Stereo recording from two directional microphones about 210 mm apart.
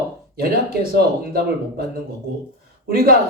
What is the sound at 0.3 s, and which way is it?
A man's voice, 45° right (ahead or behind).